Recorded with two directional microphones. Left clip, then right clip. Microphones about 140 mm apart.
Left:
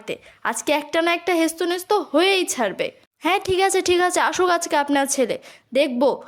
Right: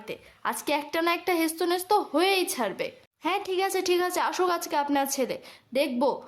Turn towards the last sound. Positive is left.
turn(degrees=30)  # may be behind; listen again after turning